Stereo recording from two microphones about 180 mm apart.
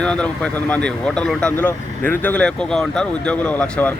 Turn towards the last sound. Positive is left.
turn(degrees=10)  # may be behind; listen again after turning